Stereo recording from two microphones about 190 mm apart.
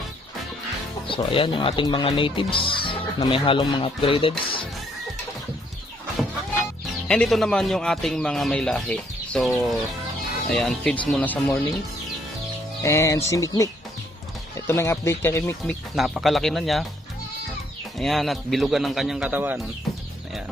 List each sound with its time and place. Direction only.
1.0 s speech: 25° left (ahead or behind)
7.1 s speech: centre (ahead or behind)
12.8 s speech: 15° left (ahead or behind)
16.0 s speech: centre (ahead or behind)
17.9 s speech: centre (ahead or behind)